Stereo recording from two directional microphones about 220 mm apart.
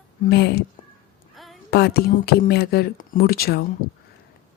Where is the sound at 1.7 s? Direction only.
45° left (ahead or behind).